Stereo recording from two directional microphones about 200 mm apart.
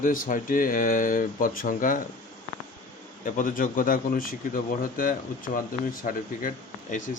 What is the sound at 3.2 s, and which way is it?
A man's voice, 40° left (ahead or behind).